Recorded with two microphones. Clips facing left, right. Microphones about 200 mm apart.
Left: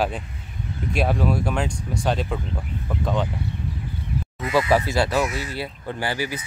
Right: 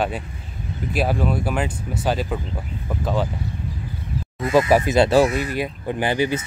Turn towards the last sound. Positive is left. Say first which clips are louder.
# right 6 dB
turn(degrees=-20)  # may be behind; listen again after turning